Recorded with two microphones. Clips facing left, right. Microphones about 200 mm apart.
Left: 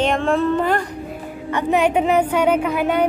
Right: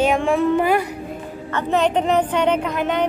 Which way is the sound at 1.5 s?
10° left (ahead or behind).